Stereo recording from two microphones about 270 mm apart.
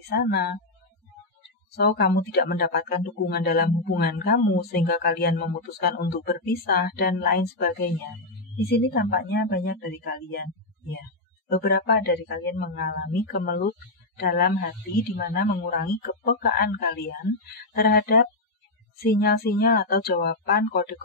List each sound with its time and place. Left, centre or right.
0.1 s speech: left
1.9 s speech: left